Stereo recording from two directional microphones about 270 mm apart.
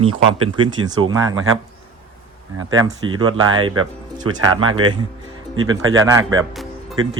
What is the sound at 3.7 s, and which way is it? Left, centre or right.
Speech, right.